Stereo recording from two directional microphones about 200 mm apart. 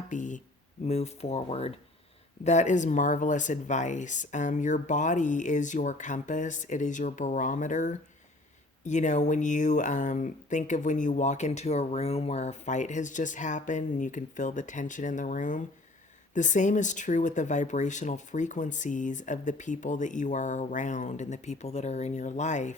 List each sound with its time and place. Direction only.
0.1 s speech: 40° left (ahead or behind)